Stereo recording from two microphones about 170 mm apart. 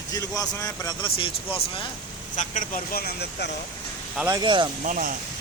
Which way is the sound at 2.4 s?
50° left (ahead or behind).